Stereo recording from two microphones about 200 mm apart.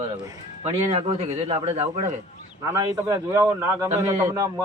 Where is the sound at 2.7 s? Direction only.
15° right (ahead or behind).